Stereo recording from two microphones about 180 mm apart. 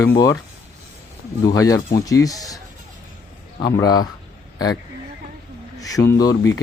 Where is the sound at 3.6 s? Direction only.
20° left (ahead or behind).